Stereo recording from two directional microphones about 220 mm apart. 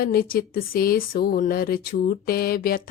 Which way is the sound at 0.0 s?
40° left (ahead or behind).